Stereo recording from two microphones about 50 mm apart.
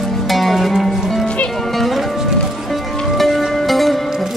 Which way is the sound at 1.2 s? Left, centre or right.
Left.